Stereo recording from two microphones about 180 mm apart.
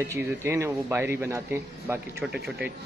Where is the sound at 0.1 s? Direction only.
15° right (ahead or behind).